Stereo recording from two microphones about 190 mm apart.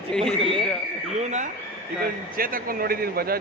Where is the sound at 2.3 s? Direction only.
50° right (ahead or behind).